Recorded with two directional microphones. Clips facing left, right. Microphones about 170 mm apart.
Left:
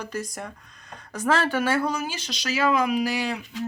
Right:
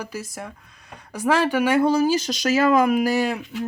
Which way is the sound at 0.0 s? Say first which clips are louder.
Even; 5° right (ahead or behind).